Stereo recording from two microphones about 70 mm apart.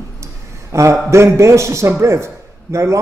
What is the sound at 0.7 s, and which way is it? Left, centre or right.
A man's voice, right.